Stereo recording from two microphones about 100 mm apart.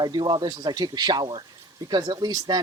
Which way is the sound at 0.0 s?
45° right (ahead or behind).